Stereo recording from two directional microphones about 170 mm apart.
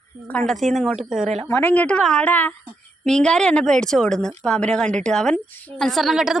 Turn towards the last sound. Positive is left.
turn(degrees=-5)  # may be behind; listen again after turning